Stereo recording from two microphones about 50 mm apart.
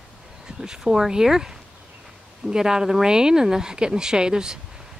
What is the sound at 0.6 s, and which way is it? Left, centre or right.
Speech, centre.